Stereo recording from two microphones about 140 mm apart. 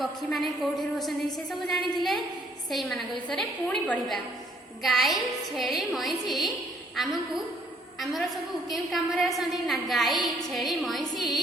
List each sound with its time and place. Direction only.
0.0 s a woman's voice: centre (ahead or behind)